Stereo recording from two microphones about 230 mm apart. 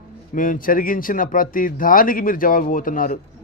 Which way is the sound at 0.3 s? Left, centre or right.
Left.